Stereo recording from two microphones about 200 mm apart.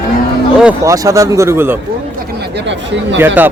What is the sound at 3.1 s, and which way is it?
Speech, 10° right (ahead or behind).